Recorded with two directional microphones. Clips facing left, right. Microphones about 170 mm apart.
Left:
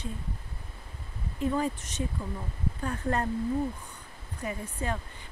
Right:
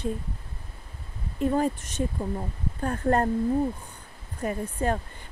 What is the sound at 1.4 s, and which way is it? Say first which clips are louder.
Speech: right 4 dB; 50° right (ahead or behind).